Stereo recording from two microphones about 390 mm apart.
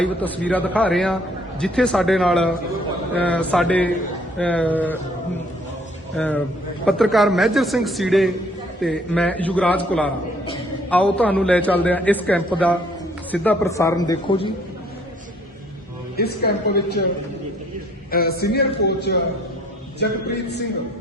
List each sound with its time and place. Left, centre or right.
0.0 s a man's voice: centre
6.1 s a man's voice: centre
16.1 s a man's voice: left
18.1 s a man's voice: left